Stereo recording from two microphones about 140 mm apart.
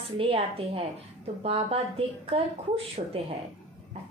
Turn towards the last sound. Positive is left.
turn(degrees=-40)  # may be behind; listen again after turning